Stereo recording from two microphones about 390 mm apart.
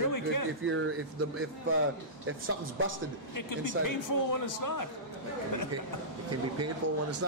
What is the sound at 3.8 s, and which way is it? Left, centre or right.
Speech, left.